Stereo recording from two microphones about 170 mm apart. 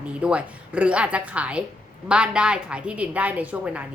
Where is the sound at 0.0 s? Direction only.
5° right (ahead or behind).